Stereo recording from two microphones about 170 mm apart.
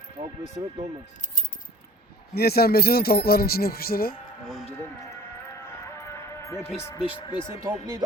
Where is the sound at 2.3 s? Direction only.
65° left (ahead or behind).